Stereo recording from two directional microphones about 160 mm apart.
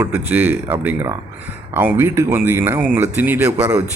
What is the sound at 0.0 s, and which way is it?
Speech, 15° right (ahead or behind).